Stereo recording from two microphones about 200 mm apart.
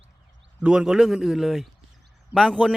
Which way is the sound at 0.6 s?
5° right (ahead or behind).